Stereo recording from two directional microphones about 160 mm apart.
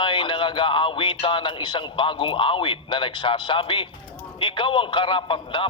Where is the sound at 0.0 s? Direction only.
30° left (ahead or behind).